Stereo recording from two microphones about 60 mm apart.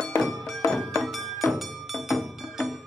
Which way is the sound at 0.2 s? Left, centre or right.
Centre.